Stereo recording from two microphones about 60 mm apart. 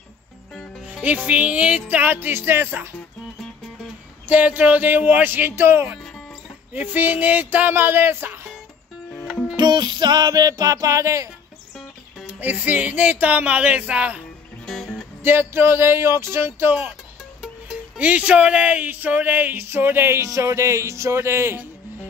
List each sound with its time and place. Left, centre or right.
1.0 s speech: right
4.3 s speech: right
6.7 s a sound: right
10.3 s music: right
12.3 s speech: right
15.2 s a sound: right
17.9 s speech: right
20.2 s speech: right